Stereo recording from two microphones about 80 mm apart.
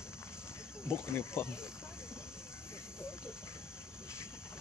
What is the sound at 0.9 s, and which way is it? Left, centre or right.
Speech, left.